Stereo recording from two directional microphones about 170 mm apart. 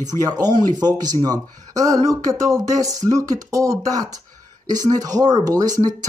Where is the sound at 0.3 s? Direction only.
25° right (ahead or behind).